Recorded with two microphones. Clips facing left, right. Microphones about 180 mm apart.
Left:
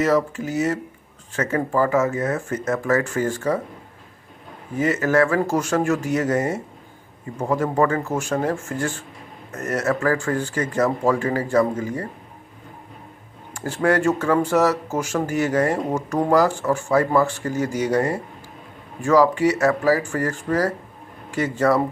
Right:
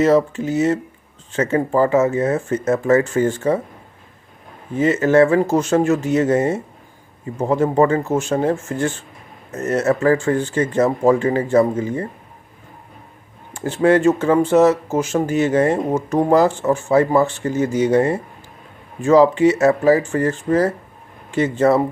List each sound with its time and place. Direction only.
0.0 s speech: 25° right (ahead or behind)
4.7 s speech: 25° right (ahead or behind)
13.5 s speech: 20° right (ahead or behind)